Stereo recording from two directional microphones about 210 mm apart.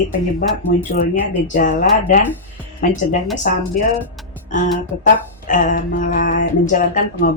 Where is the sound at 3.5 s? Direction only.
40° left (ahead or behind).